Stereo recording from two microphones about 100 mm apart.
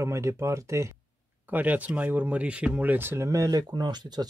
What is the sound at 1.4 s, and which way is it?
Speech, 15° right (ahead or behind).